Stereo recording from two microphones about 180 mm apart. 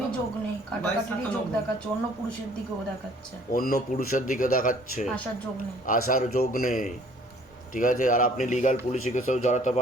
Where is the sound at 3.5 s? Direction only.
50° left (ahead or behind).